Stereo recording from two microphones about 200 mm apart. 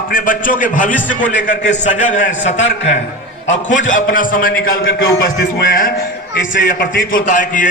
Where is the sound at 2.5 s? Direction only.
65° left (ahead or behind).